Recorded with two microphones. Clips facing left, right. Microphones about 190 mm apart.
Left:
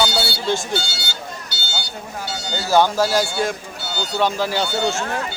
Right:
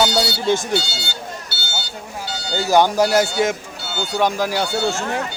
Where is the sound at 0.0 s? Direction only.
15° right (ahead or behind).